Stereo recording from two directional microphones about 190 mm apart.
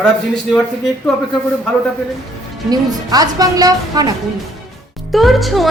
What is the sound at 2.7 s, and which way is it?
A woman's voice, 20° right (ahead or behind).